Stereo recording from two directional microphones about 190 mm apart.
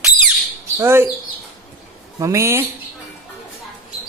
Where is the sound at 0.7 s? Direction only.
15° right (ahead or behind).